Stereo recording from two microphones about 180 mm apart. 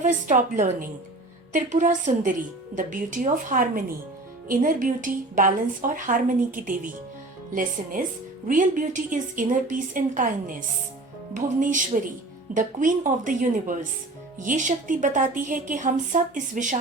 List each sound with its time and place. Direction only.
0.0 s a woman's voice: 40° right (ahead or behind)